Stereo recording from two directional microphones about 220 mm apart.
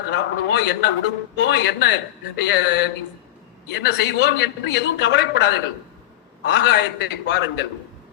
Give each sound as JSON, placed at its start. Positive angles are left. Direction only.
{"t": 0.1, "sound": "a man's voice", "side_deg": 50}